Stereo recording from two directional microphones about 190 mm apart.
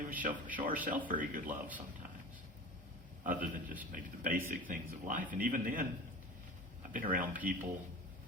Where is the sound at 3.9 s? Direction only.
45° right (ahead or behind).